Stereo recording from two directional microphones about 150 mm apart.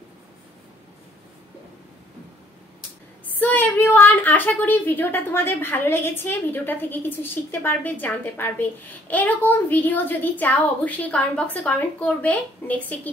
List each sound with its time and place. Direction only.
3.3 s a woman's voice: 10° left (ahead or behind)